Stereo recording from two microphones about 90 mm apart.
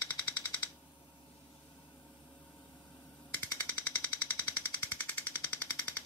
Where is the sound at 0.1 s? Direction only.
20° left (ahead or behind).